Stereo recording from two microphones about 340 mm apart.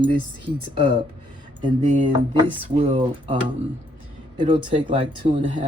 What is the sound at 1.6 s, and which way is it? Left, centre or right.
Speech, centre.